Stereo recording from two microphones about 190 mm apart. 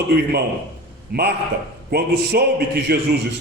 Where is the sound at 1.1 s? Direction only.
55° right (ahead or behind).